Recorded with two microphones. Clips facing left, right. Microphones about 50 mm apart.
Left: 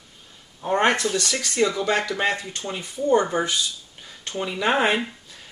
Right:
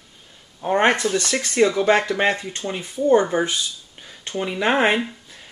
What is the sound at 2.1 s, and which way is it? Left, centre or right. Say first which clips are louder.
Speech: right 3 dB; right.